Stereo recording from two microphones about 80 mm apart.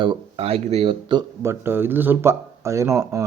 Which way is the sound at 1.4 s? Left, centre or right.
Right.